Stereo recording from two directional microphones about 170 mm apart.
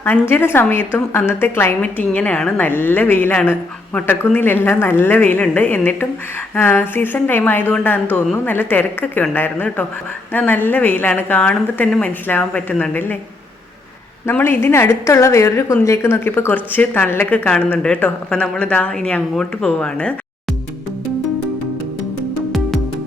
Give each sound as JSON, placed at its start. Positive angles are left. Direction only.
{"t": 0.0, "sound": "a woman's voice", "side_deg": 10}
{"t": 14.3, "sound": "a woman's voice", "side_deg": 15}